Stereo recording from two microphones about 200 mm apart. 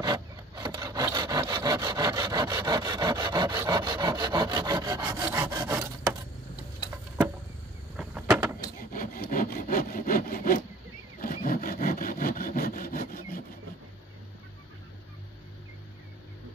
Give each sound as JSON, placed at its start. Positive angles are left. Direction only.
{"t": 0.0, "sound": "wood", "side_deg": -25}
{"t": 7.9, "sound": "a sound", "side_deg": -5}
{"t": 8.9, "sound": "sawing", "side_deg": 45}